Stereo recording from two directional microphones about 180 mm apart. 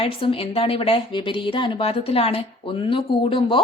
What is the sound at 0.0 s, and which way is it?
A woman's voice, 30° left (ahead or behind).